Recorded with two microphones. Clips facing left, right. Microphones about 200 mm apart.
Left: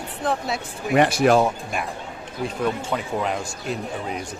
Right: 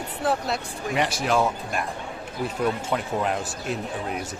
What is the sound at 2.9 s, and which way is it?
A woman's voice, centre (ahead or behind).